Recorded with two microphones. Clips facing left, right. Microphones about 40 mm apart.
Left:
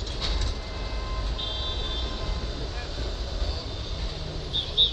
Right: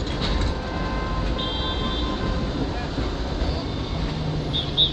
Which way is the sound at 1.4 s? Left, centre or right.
Right.